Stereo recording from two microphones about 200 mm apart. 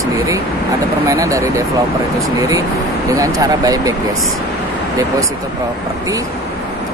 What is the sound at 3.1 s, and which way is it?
Speech, 15° right (ahead or behind).